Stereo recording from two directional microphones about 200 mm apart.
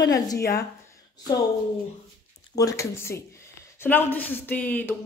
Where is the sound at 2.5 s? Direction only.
15° left (ahead or behind).